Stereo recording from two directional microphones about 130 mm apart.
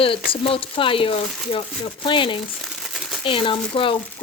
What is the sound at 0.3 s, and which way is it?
Speech, 45° left (ahead or behind).